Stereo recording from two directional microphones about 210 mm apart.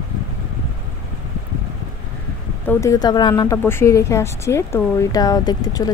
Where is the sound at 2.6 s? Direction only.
10° left (ahead or behind).